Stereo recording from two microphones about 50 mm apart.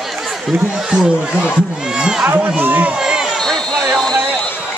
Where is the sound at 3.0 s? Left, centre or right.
Centre.